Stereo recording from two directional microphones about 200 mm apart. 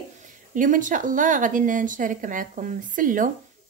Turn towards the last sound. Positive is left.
turn(degrees=-40)  # may be behind; listen again after turning